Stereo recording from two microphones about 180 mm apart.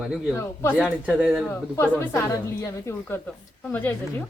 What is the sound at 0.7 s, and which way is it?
Speech, 5° right (ahead or behind).